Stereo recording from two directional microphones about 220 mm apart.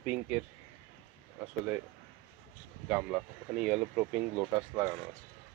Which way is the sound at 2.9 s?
5° right (ahead or behind).